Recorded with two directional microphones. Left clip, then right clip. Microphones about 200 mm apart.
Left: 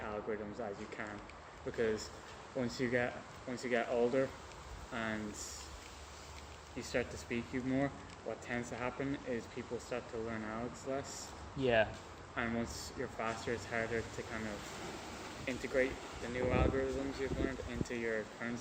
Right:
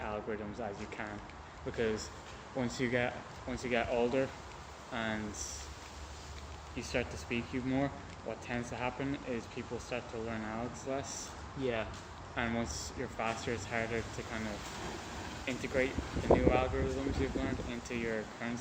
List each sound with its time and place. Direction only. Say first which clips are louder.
0.0 s speech: right 2 dB; centre (ahead or behind)
2.6 s speech: right 2 dB; centre (ahead or behind)
6.7 s speech: right 1 dB; centre (ahead or behind)
11.6 s speech: left 5 dB; 50° left (ahead or behind)
12.4 s speech: right 3 dB; centre (ahead or behind)
15.4 s speech: right 1 dB; centre (ahead or behind)